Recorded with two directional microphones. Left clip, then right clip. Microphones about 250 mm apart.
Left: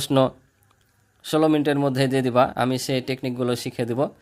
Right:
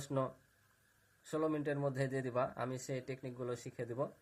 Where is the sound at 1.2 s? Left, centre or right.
Left.